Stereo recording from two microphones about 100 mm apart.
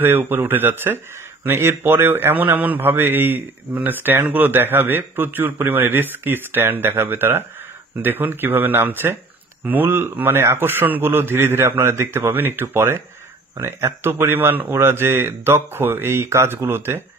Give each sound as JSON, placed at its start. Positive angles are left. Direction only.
{"t": 0.0, "sound": "speech", "side_deg": -20}